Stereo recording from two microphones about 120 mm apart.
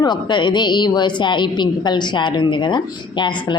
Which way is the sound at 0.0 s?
40° left (ahead or behind).